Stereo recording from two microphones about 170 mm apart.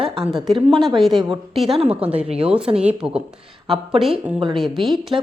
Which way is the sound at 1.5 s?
Centre (ahead or behind).